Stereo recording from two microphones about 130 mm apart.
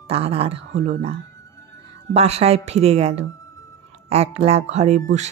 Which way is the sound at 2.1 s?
55° right (ahead or behind).